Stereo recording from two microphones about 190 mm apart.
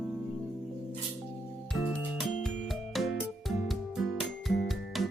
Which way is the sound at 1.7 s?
Centre (ahead or behind).